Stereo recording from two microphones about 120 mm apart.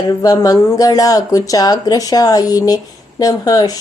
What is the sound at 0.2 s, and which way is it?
Speech, 30° left (ahead or behind).